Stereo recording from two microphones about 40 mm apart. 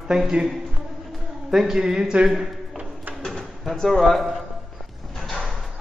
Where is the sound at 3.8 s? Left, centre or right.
Centre.